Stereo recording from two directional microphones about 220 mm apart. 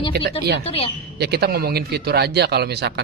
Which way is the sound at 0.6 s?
25° left (ahead or behind).